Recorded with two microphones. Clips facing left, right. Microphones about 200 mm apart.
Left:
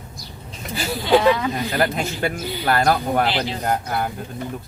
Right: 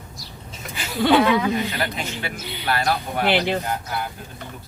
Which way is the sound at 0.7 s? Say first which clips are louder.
Left 8 dB; 35° left (ahead or behind).